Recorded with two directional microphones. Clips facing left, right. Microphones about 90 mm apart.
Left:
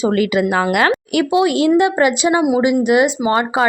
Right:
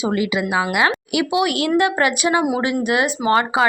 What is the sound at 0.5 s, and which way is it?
Speech, 5° right (ahead or behind).